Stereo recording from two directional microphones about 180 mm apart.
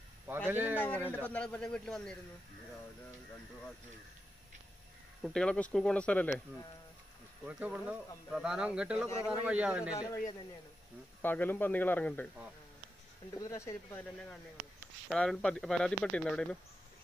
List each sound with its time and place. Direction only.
0.5 s speech: 10° right (ahead or behind)
0.7 s speech: 10° left (ahead or behind)
5.2 s speech: 5° left (ahead or behind)
7.4 s speech: 5° right (ahead or behind)
9.9 s a man's voice: 20° left (ahead or behind)
13.3 s speech: 15° left (ahead or behind)
15.0 s speech: 5° left (ahead or behind)